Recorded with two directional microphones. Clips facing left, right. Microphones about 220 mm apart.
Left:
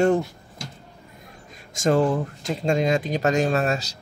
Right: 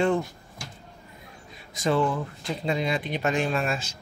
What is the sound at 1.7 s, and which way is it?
Speech, 45° left (ahead or behind).